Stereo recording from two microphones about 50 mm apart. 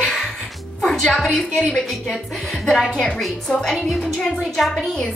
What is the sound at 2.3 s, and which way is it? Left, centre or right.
Speech, centre.